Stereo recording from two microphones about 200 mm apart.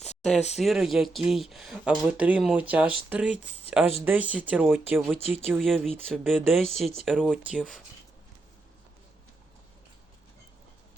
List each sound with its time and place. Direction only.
0.5 s speech: centre (ahead or behind)